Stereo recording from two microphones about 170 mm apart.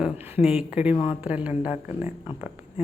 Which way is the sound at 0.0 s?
10° right (ahead or behind).